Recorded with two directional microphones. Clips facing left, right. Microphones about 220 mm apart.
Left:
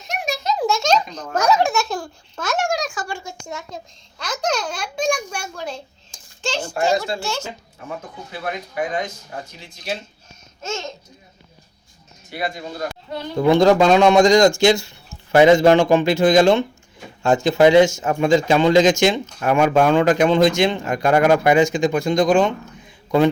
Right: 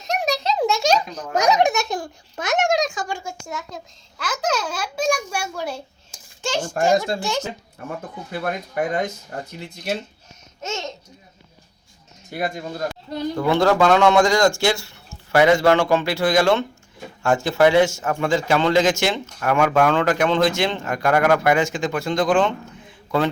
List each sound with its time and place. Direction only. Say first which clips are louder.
0.3 s a sound: left 1 dB; 30° right (ahead or behind)
3.2 s a child's voice: right 1 dB; 5° right (ahead or behind)
6.7 s speech: right 1 dB; 50° right (ahead or behind)
7.2 s speech: right 2 dB; 15° right (ahead or behind)
7.9 s speech: right 1 dB; 50° right (ahead or behind)
10.6 s babbling: left 1 dB; 20° right (ahead or behind)
13.3 s speech: left 5 dB; 20° left (ahead or behind)